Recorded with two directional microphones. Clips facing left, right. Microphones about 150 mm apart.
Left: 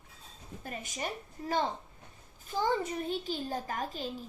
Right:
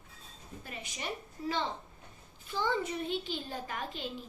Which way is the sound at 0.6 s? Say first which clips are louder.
Left 5 dB; 45° left (ahead or behind).